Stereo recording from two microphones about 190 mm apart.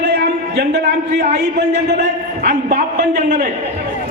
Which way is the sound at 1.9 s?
55° right (ahead or behind).